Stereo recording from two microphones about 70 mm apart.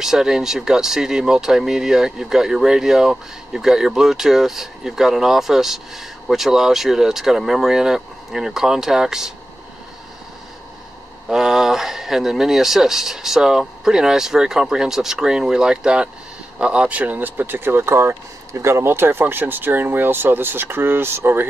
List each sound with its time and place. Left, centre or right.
0.0 s speech: centre
11.2 s speech: centre; by 21.5 s right